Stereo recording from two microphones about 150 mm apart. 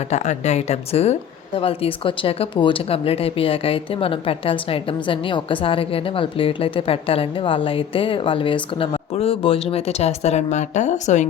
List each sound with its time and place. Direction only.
0.1 s speech: 50° left (ahead or behind)